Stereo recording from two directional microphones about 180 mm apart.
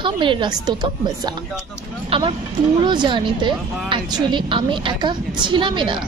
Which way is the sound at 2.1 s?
30° right (ahead or behind).